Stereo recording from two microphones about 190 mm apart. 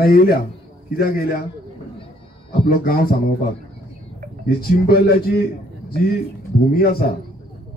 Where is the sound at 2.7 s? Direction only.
50° left (ahead or behind).